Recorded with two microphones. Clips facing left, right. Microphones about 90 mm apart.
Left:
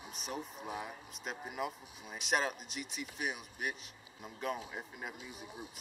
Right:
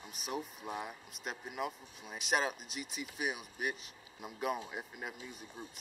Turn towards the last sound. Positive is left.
turn(degrees=5)  # may be behind; listen again after turning